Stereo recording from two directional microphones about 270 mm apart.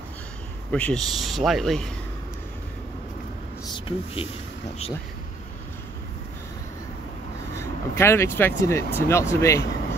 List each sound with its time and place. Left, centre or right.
0.7 s speech: centre
3.6 s a sound: centre
7.5 s speech: centre